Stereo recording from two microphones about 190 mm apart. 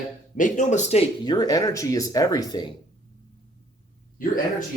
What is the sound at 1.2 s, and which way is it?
Speech, 20° left (ahead or behind).